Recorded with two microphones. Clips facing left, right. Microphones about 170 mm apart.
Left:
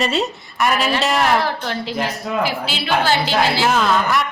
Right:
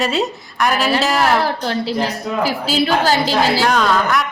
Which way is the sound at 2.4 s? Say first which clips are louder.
Right 5 dB; 40° right (ahead or behind).